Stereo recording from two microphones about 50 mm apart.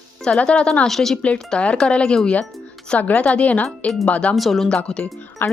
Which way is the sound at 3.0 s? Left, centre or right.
Left.